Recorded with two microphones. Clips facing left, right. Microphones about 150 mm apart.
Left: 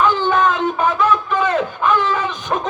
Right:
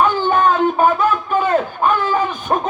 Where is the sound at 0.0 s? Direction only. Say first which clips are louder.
Right 1 dB; 45° right (ahead or behind).